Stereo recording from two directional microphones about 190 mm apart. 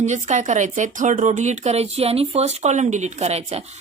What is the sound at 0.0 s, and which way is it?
Speech, 40° right (ahead or behind).